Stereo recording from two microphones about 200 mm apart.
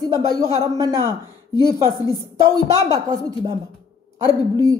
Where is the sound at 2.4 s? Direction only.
15° right (ahead or behind).